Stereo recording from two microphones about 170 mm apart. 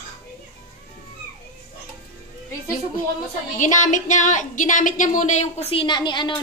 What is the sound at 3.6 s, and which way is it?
Speech, 45° left (ahead or behind).